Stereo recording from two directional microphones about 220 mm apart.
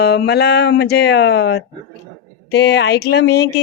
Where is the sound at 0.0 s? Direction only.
45° left (ahead or behind).